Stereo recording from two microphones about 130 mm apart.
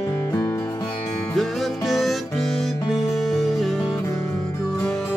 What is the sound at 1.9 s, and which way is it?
Music, centre (ahead or behind).